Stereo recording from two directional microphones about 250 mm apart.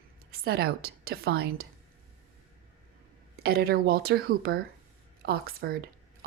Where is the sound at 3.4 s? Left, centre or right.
Right.